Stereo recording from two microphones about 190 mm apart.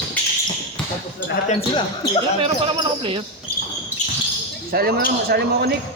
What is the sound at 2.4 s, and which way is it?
Speech, 30° right (ahead or behind).